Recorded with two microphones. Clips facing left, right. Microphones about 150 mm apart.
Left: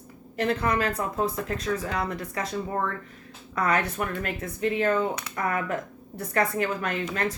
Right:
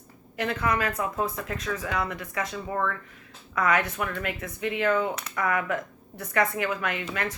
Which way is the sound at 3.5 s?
30° left (ahead or behind).